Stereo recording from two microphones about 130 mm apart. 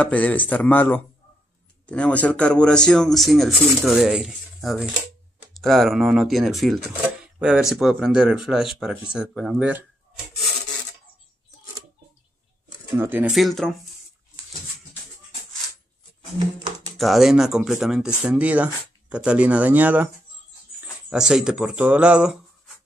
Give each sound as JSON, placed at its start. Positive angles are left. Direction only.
{"t": 0.0, "sound": "a man's voice", "side_deg": 10}
{"t": 12.9, "sound": "speech", "side_deg": -15}
{"t": 13.3, "sound": "speech", "side_deg": 0}
{"t": 16.9, "sound": "speech", "side_deg": 0}
{"t": 21.1, "sound": "speech", "side_deg": -5}